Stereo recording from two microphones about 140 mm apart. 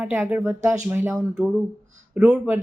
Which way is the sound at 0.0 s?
15° right (ahead or behind).